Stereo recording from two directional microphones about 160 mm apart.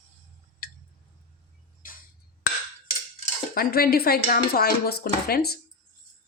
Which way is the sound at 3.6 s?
70° left (ahead or behind).